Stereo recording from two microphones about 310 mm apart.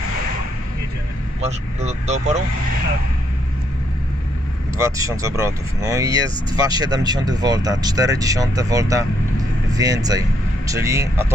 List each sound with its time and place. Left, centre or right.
1.4 s speech: right
4.8 s speech: centre